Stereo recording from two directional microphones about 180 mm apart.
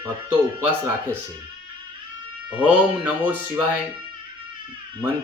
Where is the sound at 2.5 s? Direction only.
10° right (ahead or behind).